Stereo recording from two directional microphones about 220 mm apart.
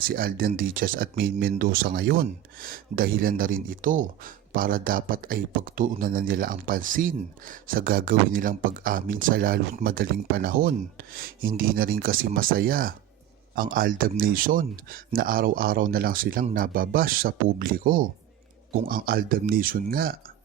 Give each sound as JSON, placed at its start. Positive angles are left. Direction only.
{"t": 0.0, "sound": "speech", "side_deg": -40}